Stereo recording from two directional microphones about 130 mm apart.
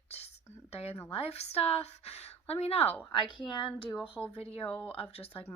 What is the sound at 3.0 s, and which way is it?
Speech, 40° left (ahead or behind).